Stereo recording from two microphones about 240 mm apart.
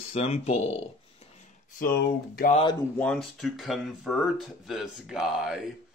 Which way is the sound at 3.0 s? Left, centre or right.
Centre.